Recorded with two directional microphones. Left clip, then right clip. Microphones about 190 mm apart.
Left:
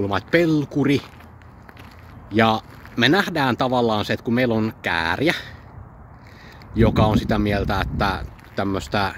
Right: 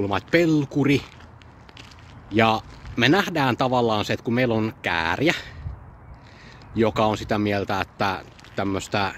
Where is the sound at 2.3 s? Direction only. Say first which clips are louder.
Left 1 dB; 20° right (ahead or behind).